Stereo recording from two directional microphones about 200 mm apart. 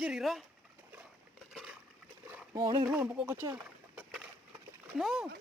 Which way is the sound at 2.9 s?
10° right (ahead or behind).